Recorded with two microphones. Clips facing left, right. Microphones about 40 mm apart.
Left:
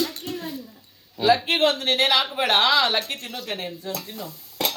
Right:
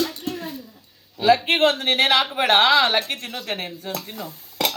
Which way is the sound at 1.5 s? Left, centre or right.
Right.